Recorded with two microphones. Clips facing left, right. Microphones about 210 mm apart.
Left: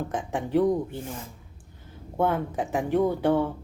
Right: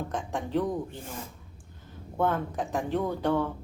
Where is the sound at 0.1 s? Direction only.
15° left (ahead or behind).